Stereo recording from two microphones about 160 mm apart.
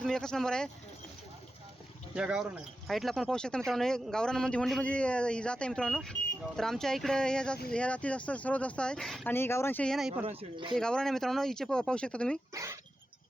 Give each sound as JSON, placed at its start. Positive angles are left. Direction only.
{"t": 0.0, "sound": "speech", "side_deg": 5}
{"t": 2.1, "sound": "speech", "side_deg": -5}
{"t": 9.3, "sound": "speech", "side_deg": 15}
{"t": 10.2, "sound": "speech", "side_deg": -30}
{"t": 10.8, "sound": "speech", "side_deg": 5}
{"t": 12.5, "sound": "speech", "side_deg": -20}